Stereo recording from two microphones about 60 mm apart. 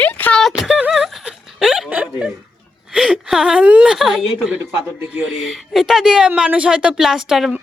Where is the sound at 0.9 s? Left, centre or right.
Centre.